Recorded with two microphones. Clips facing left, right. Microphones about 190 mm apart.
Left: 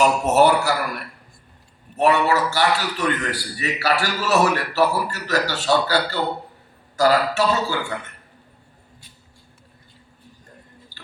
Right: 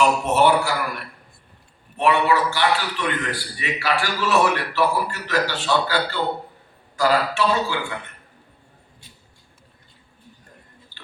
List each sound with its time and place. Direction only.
0.0 s speech: 40° left (ahead or behind)
2.0 s a man's voice: 40° left (ahead or behind)
10.9 s a sound: 40° left (ahead or behind)